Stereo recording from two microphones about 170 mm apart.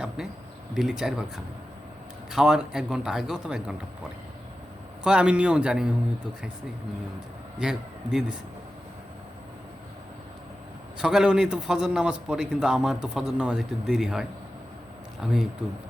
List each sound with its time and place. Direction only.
0.7 s speech: centre (ahead or behind)
2.3 s a man's voice: 5° right (ahead or behind)
5.0 s a man's voice: 5° right (ahead or behind)
7.6 s a man's voice: 5° right (ahead or behind)
10.9 s a man's voice: 5° right (ahead or behind)